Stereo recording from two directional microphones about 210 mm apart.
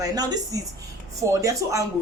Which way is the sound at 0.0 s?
15° right (ahead or behind).